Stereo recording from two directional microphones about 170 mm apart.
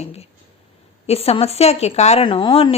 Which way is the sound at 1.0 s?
35° left (ahead or behind).